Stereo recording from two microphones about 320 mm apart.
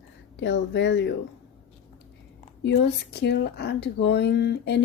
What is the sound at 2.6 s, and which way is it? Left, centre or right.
Speech, left.